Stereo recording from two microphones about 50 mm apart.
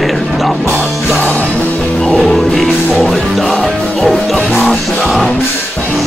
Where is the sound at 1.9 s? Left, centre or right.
Centre.